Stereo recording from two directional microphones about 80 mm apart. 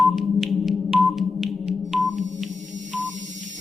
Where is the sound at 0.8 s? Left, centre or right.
Centre.